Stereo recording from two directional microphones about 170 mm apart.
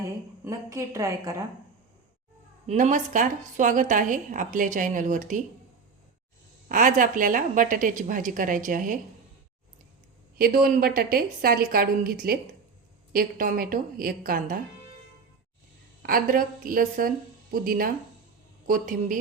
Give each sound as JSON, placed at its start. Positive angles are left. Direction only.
{"t": 0.0, "sound": "a woman's voice", "side_deg": -20}
{"t": 2.6, "sound": "a woman's voice", "side_deg": -45}
{"t": 6.7, "sound": "a woman's voice", "side_deg": -50}
{"t": 10.3, "sound": "a woman's voice", "side_deg": -60}
{"t": 16.0, "sound": "a woman's voice", "side_deg": -55}